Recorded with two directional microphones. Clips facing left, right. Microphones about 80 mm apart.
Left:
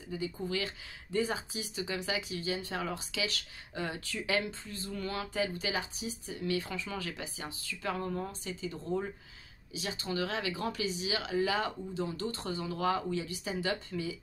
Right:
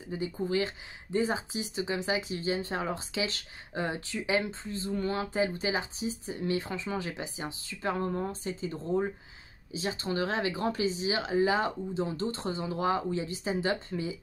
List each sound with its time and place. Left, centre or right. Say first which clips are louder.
0.1 s speech: right 5 dB; right